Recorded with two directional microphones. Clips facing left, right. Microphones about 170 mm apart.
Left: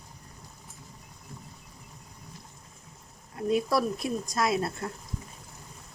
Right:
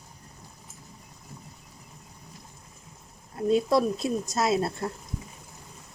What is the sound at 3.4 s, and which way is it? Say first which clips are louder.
Speech: right 3 dB; 25° right (ahead or behind).